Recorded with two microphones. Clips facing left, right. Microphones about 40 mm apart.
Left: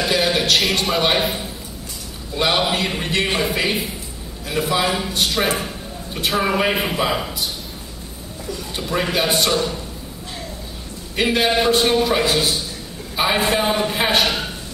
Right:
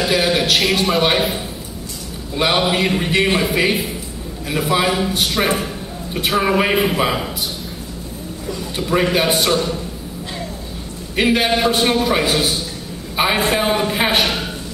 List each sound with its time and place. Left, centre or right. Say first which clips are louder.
0.0 s a man's voice: right 2 dB; centre
4.5 s a man's voice: right 2 dB; centre
6.5 s a man's voice: right 3 dB; centre
8.7 s a man's voice: right 4 dB; centre
11.1 s a man's voice: right 2 dB; centre